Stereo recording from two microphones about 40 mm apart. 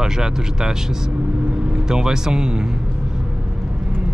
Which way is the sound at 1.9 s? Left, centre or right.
Centre.